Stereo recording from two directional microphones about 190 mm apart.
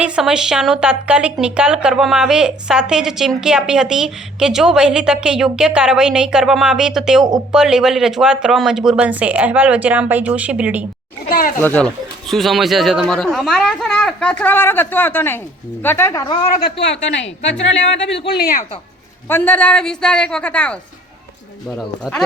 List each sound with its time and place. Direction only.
0.0 s speech: 5° right (ahead or behind)
11.3 s speech: 45° left (ahead or behind)
11.6 s a woman's voice: 10° left (ahead or behind)
16.6 s speech: 60° left (ahead or behind)
19.3 s speech: 10° left (ahead or behind)
21.8 s speech: 5° left (ahead or behind)